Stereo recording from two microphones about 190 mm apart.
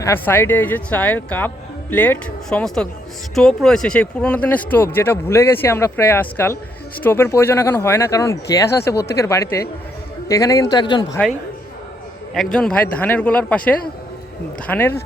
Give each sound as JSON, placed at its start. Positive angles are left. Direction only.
{"t": 0.0, "sound": "speech", "side_deg": 10}
{"t": 12.3, "sound": "speech", "side_deg": 0}